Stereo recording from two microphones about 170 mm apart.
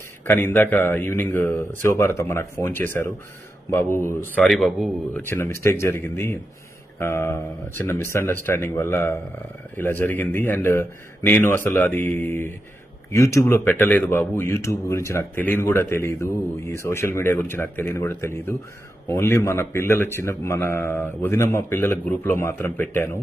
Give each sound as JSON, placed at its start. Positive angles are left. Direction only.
{"t": 0.3, "sound": "a man's voice", "side_deg": 15}
{"t": 5.1, "sound": "speech", "side_deg": 15}